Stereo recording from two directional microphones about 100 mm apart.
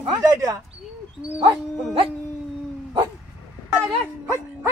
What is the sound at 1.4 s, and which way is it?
Speech, 70° right (ahead or behind).